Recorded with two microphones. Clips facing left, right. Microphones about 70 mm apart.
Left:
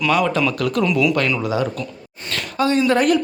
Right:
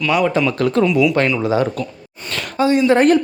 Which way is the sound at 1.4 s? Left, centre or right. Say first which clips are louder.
Right 4 dB; right.